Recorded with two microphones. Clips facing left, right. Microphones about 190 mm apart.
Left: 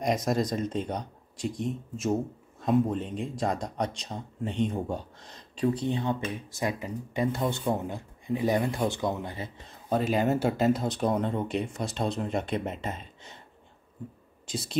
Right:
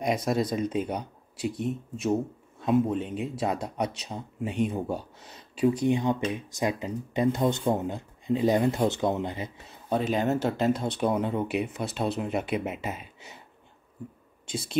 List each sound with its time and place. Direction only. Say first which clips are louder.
0.0 s speech: even; centre (ahead or behind); by 9.5 s 20° right (ahead or behind)
9.7 s speech: even; centre (ahead or behind)
14.4 s speech: right 1 dB; centre (ahead or behind)